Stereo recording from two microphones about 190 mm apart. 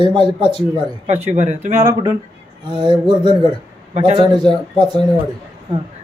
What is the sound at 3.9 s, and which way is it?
Speech, 35° right (ahead or behind).